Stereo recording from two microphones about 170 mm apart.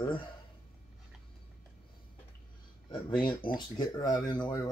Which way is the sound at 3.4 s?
55° left (ahead or behind).